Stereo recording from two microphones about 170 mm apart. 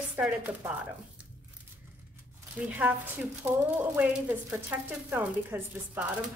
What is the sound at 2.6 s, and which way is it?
A woman's voice, 10° right (ahead or behind).